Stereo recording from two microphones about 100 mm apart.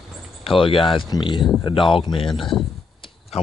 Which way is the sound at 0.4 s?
65° left (ahead or behind).